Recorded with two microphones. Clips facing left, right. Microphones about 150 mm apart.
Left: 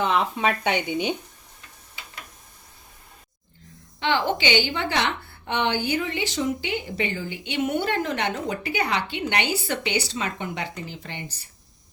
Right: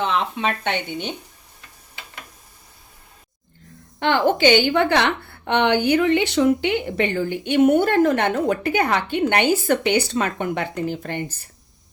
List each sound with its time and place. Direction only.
0.0 s speech: 5° left (ahead or behind)
4.0 s a woman's voice: 50° right (ahead or behind)